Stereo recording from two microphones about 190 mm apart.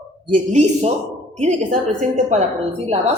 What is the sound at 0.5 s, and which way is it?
A woman's voice, 40° right (ahead or behind).